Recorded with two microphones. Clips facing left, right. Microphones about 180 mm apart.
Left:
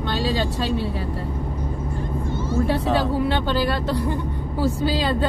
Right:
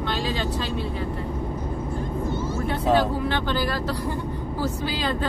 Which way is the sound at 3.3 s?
30° left (ahead or behind).